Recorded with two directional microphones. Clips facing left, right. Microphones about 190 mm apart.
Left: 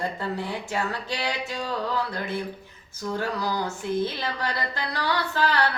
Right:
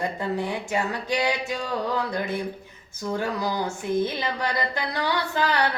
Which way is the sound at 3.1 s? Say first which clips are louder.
Right 1 dB; 15° right (ahead or behind).